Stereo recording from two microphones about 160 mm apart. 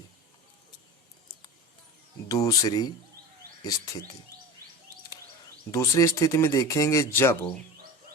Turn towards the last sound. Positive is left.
turn(degrees=15)  # may be behind; listen again after turning